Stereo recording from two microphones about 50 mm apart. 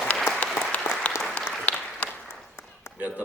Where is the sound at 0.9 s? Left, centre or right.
Left.